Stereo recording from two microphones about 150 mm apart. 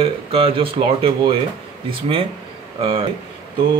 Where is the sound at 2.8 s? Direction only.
35° right (ahead or behind).